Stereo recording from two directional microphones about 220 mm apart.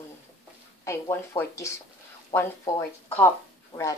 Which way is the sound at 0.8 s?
10° left (ahead or behind).